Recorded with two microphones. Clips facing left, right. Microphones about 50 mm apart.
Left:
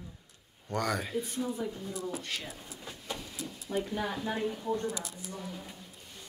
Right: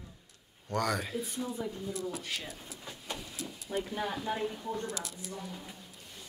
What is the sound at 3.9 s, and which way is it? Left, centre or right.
Speech, centre.